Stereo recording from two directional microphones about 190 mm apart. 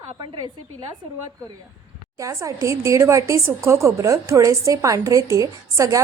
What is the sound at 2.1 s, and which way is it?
A woman's voice, 15° right (ahead or behind).